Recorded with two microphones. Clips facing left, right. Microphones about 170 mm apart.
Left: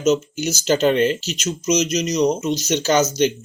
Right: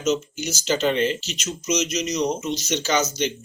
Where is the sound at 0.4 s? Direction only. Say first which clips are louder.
Left 5 dB; 45° left (ahead or behind).